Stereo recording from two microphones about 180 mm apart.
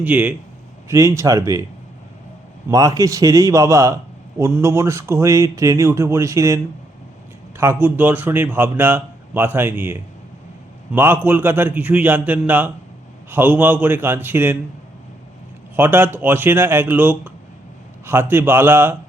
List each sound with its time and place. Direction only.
0.0 s speech: 10° right (ahead or behind)
2.6 s a man's voice: 20° right (ahead or behind)
7.6 s speech: 10° right (ahead or behind)
15.7 s speech: 10° right (ahead or behind)